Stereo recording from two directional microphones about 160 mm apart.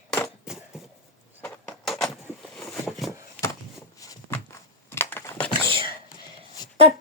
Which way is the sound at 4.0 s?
20° left (ahead or behind).